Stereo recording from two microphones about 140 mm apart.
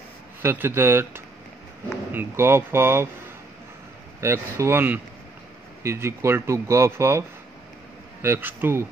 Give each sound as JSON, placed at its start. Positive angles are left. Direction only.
{"t": 0.4, "sound": "speech", "side_deg": -15}
{"t": 4.2, "sound": "speech", "side_deg": -20}